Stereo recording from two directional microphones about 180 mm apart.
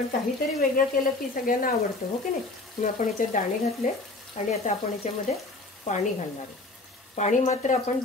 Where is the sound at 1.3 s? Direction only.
55° left (ahead or behind).